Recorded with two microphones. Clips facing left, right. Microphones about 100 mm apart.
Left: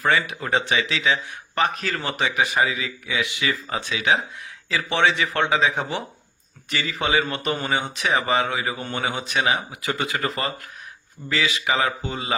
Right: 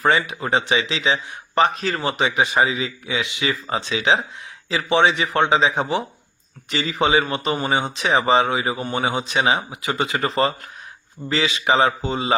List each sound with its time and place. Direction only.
0.0 s speech: 20° right (ahead or behind)